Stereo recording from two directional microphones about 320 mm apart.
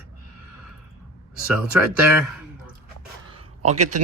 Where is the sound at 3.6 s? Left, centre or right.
Right.